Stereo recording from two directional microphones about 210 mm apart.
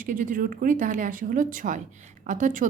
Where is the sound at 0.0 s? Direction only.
40° right (ahead or behind).